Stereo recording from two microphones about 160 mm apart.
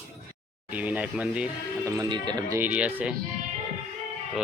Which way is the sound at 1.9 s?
25° right (ahead or behind).